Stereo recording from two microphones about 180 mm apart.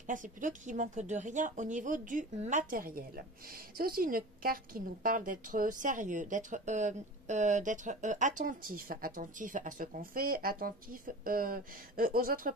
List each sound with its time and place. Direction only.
0.0 s speech: 45° right (ahead or behind)